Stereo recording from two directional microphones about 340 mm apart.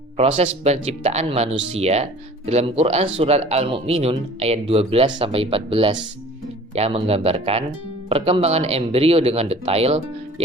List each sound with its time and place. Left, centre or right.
0.2 s speech: centre